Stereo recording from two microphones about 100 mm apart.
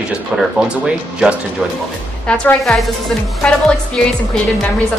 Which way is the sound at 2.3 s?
10° left (ahead or behind).